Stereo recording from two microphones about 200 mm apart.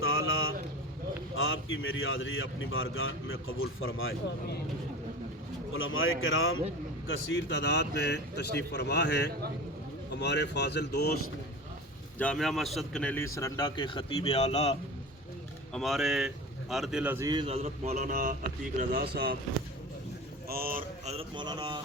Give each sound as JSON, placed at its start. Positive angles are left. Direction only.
{"t": 0.0, "sound": "a sound", "side_deg": 85}
{"t": 1.4, "sound": "a man's voice", "side_deg": 90}
{"t": 5.7, "sound": "a man's voice", "side_deg": 90}
{"t": 7.3, "sound": "a man's voice", "side_deg": 60}
{"t": 12.2, "sound": "speech", "side_deg": 5}
{"t": 15.7, "sound": "speech", "side_deg": 0}
{"t": 20.5, "sound": "speech", "side_deg": -45}
{"t": 21.1, "sound": "a man's voice", "side_deg": -25}